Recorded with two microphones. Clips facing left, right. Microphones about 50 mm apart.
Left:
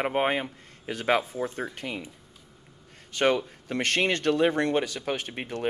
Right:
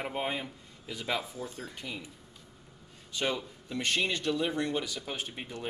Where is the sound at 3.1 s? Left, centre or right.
Left.